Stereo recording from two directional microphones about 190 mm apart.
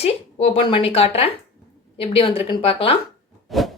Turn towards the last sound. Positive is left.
turn(degrees=0)  # may be behind; listen again after turning